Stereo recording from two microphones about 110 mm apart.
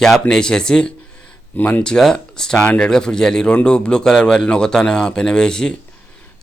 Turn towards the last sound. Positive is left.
turn(degrees=5)  # may be behind; listen again after turning